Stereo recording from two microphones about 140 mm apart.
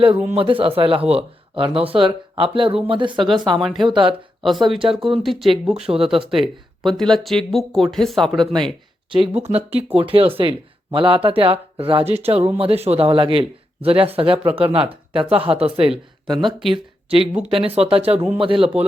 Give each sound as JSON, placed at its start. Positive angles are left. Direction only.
{"t": 0.3, "sound": "speech", "side_deg": -40}
{"t": 3.6, "sound": "speech", "side_deg": 0}
{"t": 3.8, "sound": "speech", "side_deg": -35}
{"t": 4.4, "sound": "speech", "side_deg": 0}
{"t": 9.1, "sound": "speech", "side_deg": -45}